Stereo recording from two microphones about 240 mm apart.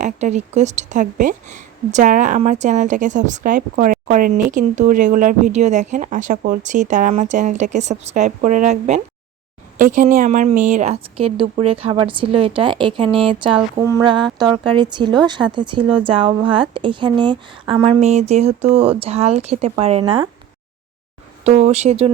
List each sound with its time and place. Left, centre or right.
0.0 s a woman's voice: right
21.4 s a woman's voice: right